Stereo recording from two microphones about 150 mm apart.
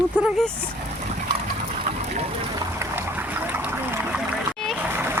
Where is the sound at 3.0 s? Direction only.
15° right (ahead or behind).